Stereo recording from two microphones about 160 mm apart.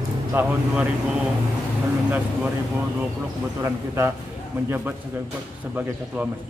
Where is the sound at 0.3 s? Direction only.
10° right (ahead or behind).